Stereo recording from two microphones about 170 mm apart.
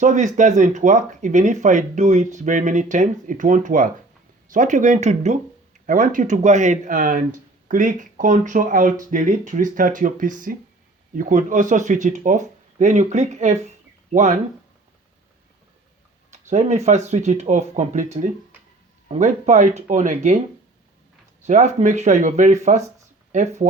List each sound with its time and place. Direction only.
0.0 s speech: 45° right (ahead or behind)
16.3 s speech: 40° right (ahead or behind)
21.4 s speech: 45° right (ahead or behind)